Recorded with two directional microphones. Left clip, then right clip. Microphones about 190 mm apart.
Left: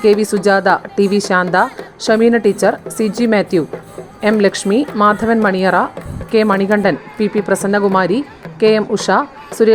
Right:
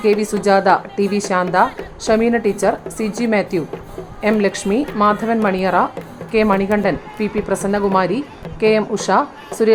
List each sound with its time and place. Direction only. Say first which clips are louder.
0.0 s speech: left 4 dB; 30° left (ahead or behind)